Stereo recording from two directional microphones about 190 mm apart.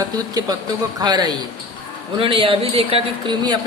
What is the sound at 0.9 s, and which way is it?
Speech, 20° right (ahead or behind).